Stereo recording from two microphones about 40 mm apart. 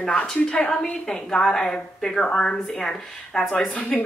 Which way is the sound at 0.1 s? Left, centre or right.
Left.